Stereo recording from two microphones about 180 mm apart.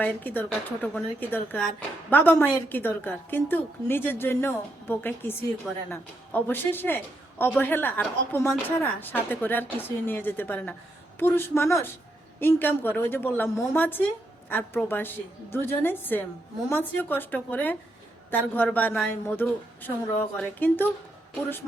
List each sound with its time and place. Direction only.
0.0 s a woman's voice: 10° left (ahead or behind)